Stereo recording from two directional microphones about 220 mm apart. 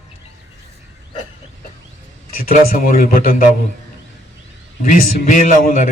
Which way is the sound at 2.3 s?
40° left (ahead or behind).